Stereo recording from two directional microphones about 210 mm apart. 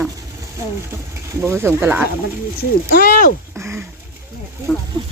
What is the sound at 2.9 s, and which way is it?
Speech, 40° left (ahead or behind).